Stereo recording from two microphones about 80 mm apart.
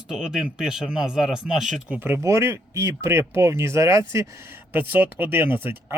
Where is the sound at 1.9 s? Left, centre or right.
Right.